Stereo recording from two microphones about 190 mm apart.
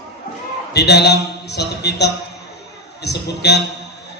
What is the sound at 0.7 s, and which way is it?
A man's voice, 60° left (ahead or behind).